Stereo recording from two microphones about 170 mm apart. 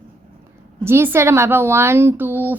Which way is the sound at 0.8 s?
15° right (ahead or behind).